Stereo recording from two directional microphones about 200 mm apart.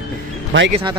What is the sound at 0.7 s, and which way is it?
Speech, 25° right (ahead or behind).